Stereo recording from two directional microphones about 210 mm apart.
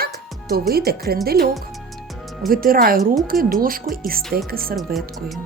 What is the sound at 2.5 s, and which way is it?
A woman's voice, 45° right (ahead or behind).